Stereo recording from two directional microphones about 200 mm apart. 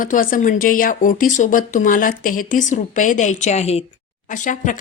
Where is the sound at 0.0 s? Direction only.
45° left (ahead or behind).